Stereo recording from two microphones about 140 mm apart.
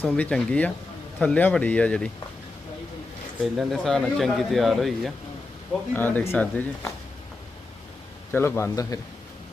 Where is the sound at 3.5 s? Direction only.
Centre (ahead or behind).